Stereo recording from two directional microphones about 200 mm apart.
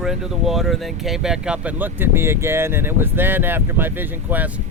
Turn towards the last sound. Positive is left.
turn(degrees=-10)  # may be behind; listen again after turning